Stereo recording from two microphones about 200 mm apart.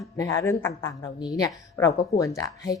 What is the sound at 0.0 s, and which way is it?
Speech, 15° left (ahead or behind).